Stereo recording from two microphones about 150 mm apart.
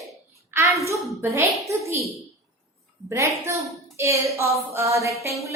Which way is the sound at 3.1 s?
20° right (ahead or behind).